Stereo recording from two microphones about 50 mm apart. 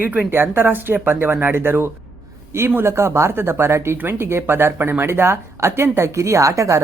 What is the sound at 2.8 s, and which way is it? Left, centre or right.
Speech, right.